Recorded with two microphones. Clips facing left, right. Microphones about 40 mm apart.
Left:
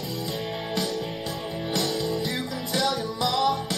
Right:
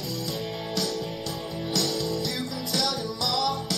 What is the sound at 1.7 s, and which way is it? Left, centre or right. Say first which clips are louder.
Music: left 1 dB; centre.